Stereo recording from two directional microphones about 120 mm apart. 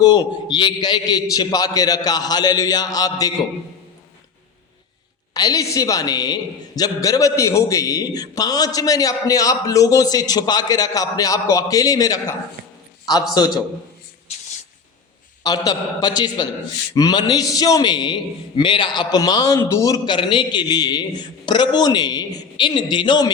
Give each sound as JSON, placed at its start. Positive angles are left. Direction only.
{"t": 0.0, "sound": "a man's voice", "side_deg": 35}
{"t": 5.3, "sound": "a man's voice", "side_deg": 30}
{"t": 15.4, "sound": "a man's voice", "side_deg": 30}